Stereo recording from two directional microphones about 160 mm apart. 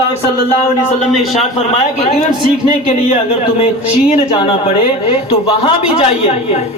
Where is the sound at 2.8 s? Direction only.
40° left (ahead or behind).